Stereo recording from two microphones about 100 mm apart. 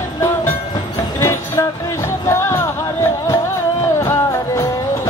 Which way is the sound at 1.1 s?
35° left (ahead or behind).